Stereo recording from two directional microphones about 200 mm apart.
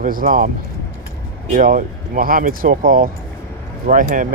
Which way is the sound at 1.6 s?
40° right (ahead or behind).